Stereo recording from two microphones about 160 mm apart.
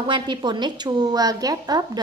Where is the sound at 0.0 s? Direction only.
30° right (ahead or behind).